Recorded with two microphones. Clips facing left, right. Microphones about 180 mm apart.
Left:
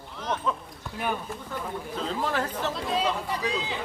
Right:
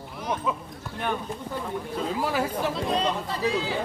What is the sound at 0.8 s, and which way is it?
Speech, 5° left (ahead or behind).